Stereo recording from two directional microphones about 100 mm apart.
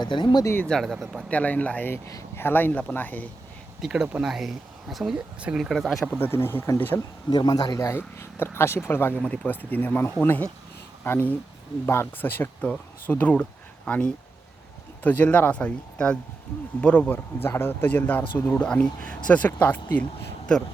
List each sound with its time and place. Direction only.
0.0 s speech: 50° left (ahead or behind)
0.4 s speech: 20° left (ahead or behind)
0.7 s speech: centre (ahead or behind)
1.3 s speech: 15° left (ahead or behind)
2.0 s speech: 35° left (ahead or behind)
2.4 s speech: 20° left (ahead or behind)
3.8 s speech: 5° right (ahead or behind)
5.4 s speech: 10° right (ahead or behind)
5.6 s speech: centre (ahead or behind)
6.1 s speech: 20° left (ahead or behind)
7.3 s speech: 45° left (ahead or behind)
7.8 s speech: 30° left (ahead or behind)